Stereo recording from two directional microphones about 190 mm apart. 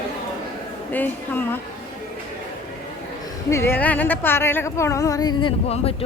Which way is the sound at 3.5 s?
10° left (ahead or behind).